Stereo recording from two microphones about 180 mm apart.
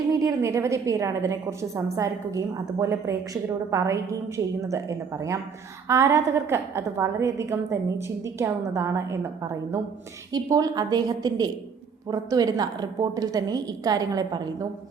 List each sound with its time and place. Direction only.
0.1 s a woman's voice: 20° right (ahead or behind)